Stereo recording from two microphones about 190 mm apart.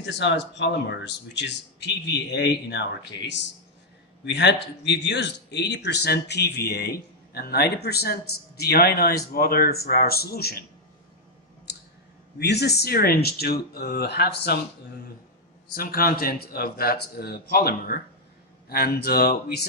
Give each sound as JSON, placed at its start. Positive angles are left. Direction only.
{"t": 0.0, "sound": "speech", "side_deg": 65}
{"t": 12.4, "sound": "speech", "side_deg": 60}
{"t": 15.7, "sound": "speech", "side_deg": 50}